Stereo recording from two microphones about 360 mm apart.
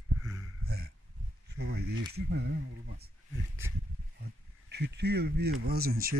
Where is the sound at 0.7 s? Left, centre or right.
Right.